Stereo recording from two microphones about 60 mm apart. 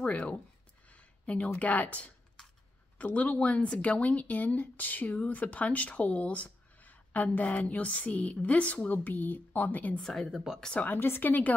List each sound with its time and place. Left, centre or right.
0.0 s speech: left
0.9 s a sound: left
1.6 s speech: left
10.0 s a woman's voice: centre
10.3 s speech: centre
10.6 s speech: centre
10.9 s speech: left